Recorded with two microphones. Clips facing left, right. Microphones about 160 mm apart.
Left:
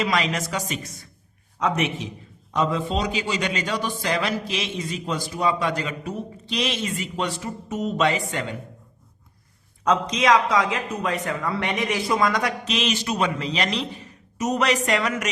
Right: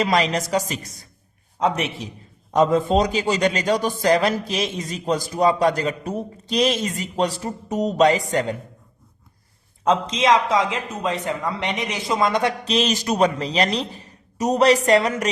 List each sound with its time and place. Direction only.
0.0 s a man's voice: 40° right (ahead or behind)
2.5 s a man's voice: 45° right (ahead or behind)
9.8 s a man's voice: 25° right (ahead or behind)